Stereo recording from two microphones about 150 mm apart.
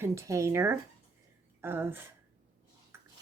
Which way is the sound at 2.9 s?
15° right (ahead or behind).